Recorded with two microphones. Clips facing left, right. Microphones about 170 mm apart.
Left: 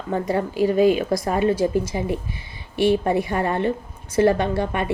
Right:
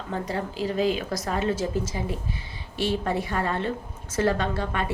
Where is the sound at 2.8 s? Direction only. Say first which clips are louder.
Left 7 dB; 15° left (ahead or behind).